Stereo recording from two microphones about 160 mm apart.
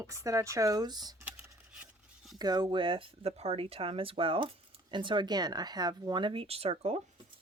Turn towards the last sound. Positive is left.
turn(degrees=-40)  # may be behind; listen again after turning